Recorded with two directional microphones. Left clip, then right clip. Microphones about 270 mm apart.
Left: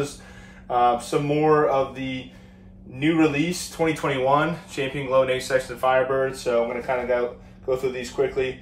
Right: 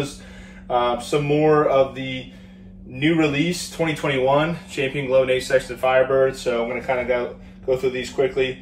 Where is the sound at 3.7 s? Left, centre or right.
Centre.